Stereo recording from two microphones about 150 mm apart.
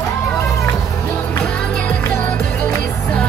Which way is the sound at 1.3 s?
5° left (ahead or behind).